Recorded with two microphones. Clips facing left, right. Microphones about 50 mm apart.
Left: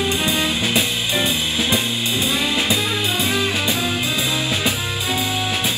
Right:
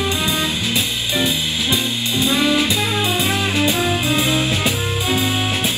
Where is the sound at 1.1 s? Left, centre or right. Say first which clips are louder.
Right 2 dB; left.